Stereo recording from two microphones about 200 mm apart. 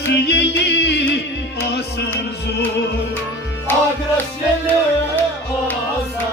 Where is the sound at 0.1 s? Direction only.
55° left (ahead or behind).